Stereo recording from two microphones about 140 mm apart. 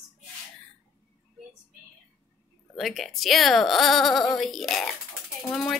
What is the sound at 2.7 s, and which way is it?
A woman's voice, centre (ahead or behind).